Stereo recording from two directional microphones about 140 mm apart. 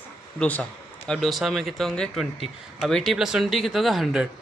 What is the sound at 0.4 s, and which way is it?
Speech, 5° left (ahead or behind).